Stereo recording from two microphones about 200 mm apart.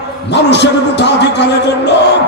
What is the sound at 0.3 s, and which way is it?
A man's voice, 60° left (ahead or behind).